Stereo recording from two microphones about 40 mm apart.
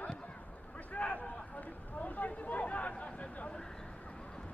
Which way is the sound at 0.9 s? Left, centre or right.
Left.